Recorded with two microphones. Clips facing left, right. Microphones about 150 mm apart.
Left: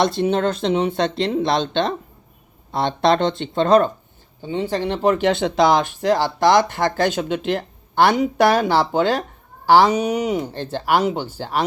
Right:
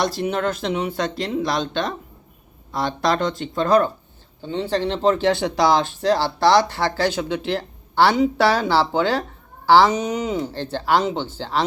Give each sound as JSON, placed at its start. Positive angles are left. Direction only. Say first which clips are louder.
{"t": 0.0, "sound": "speech", "louder": "left 4 dB", "side_deg": 25}
{"t": 4.4, "sound": "speech", "louder": "even", "side_deg": 15}